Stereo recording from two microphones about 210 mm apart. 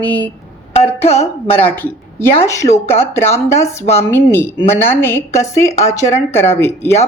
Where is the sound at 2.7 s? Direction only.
30° left (ahead or behind).